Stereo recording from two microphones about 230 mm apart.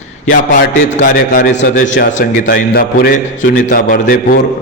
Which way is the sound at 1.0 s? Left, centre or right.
Left.